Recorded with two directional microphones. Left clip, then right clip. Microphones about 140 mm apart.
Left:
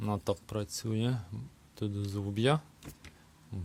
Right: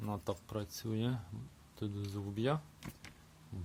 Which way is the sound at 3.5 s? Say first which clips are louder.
Left 5 dB; 50° left (ahead or behind).